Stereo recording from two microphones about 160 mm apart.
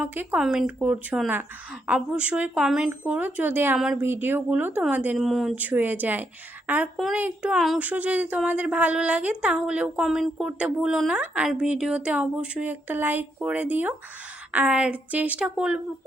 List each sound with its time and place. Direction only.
0.0 s a woman's voice: 10° right (ahead or behind)